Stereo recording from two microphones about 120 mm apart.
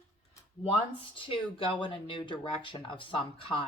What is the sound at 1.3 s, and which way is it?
Speech, 45° left (ahead or behind).